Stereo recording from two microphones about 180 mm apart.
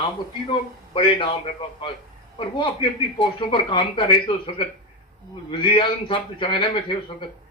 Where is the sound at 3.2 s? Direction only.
25° left (ahead or behind).